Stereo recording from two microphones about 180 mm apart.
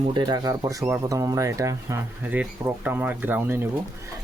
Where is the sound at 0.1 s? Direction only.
25° right (ahead or behind).